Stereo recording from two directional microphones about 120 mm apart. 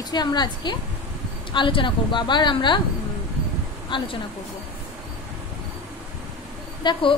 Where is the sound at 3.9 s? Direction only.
40° left (ahead or behind).